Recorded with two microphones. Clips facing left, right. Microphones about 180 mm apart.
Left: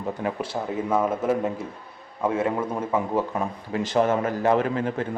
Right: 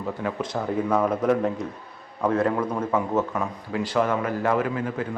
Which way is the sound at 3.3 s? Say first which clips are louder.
Even; 25° left (ahead or behind).